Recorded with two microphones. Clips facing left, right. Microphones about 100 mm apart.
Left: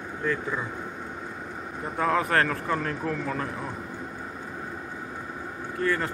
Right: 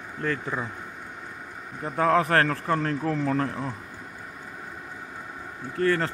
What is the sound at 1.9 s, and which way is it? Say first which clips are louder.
A man's voice: right 3 dB; 45° right (ahead or behind).